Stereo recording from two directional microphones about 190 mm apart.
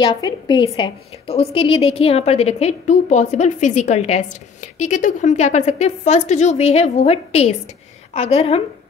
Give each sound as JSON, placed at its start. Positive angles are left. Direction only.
{"t": 0.0, "sound": "a woman's voice", "side_deg": 20}